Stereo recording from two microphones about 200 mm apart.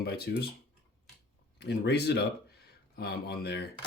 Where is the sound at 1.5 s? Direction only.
60° left (ahead or behind).